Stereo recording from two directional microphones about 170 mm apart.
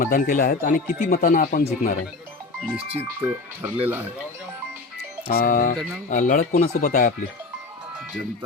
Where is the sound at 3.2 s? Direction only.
10° right (ahead or behind).